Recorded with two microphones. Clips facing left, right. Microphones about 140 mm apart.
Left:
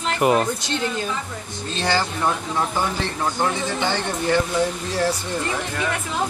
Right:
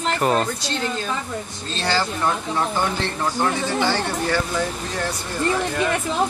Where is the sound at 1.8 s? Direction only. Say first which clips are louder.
Even; 15° left (ahead or behind).